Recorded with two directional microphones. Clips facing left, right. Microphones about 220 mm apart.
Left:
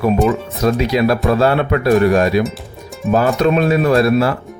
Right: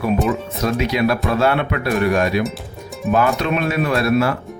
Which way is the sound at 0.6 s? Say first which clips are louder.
Left 4 dB; 40° left (ahead or behind).